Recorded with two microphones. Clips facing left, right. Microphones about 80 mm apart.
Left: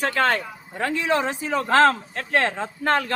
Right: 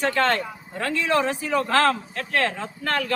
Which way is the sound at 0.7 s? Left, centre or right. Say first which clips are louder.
Even; left.